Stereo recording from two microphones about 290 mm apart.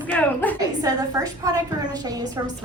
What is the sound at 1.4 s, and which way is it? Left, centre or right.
Speech, centre.